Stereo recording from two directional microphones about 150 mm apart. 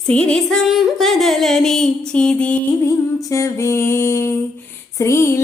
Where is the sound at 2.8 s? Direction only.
20° left (ahead or behind).